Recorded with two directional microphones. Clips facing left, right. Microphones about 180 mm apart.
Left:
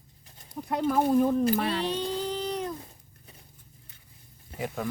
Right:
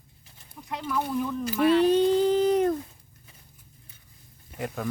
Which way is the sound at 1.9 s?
50° right (ahead or behind).